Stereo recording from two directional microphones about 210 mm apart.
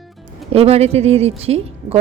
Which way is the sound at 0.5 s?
30° right (ahead or behind).